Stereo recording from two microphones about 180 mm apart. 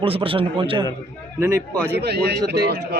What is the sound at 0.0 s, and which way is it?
Speech, 30° right (ahead or behind).